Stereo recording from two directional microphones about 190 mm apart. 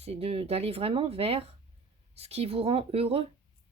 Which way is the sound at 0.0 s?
30° right (ahead or behind).